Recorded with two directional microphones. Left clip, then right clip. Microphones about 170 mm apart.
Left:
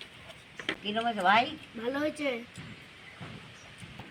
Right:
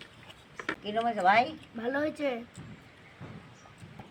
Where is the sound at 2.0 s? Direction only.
15° right (ahead or behind).